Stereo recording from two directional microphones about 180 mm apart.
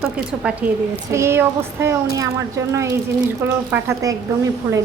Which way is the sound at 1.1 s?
15° right (ahead or behind).